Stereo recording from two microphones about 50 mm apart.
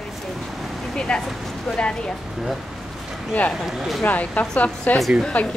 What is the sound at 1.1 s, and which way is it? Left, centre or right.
Speech, centre.